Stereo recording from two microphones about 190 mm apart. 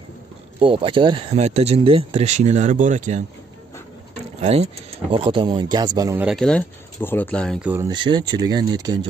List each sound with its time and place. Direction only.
0.6 s speech: 30° right (ahead or behind)
4.4 s speech: 35° right (ahead or behind)
6.1 s speech: centre (ahead or behind)
7.6 s speech: 10° right (ahead or behind)
7.9 s speech: 25° right (ahead or behind)